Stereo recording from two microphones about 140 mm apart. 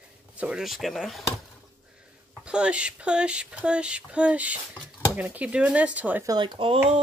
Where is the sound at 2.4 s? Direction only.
5° right (ahead or behind).